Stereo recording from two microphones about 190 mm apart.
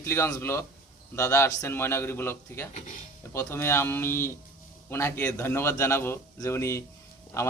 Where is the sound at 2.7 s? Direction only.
40° left (ahead or behind).